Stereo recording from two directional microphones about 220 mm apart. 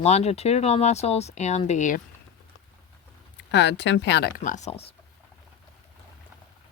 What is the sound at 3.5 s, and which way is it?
Speech, 50° left (ahead or behind).